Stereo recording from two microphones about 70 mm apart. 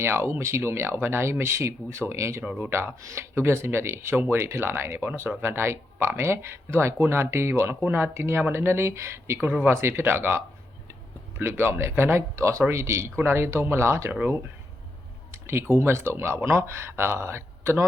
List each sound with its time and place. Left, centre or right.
0.0 s speech: right
7.8 s speech: right
15.3 s a sound: right
15.7 s speech: right